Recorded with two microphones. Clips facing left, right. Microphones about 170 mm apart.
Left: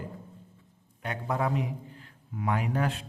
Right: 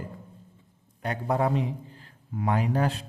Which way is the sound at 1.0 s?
35° right (ahead or behind).